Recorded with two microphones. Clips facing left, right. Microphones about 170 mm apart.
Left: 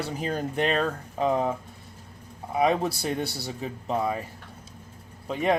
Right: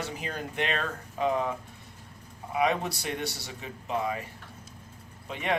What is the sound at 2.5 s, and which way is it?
Speech, 35° left (ahead or behind).